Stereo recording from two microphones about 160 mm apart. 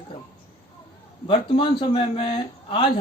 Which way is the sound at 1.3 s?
30° left (ahead or behind).